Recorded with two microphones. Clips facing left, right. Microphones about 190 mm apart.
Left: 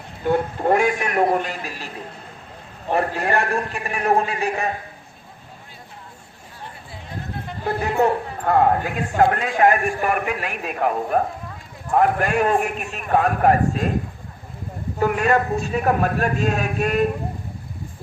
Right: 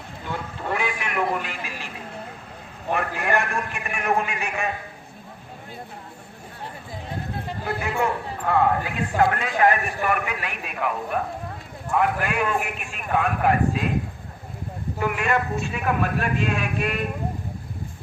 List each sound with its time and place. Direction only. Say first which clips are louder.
0.3 s a man's voice: left 11 dB; 45° left (ahead or behind)
2.9 s a man's voice: left 3 dB; 35° left (ahead or behind)
7.7 s a man's voice: left 6 dB; 35° left (ahead or behind)
14.9 s a man's voice: left 5 dB; 40° left (ahead or behind)